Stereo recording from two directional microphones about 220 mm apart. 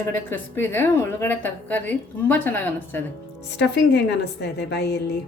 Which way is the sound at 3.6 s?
50° left (ahead or behind).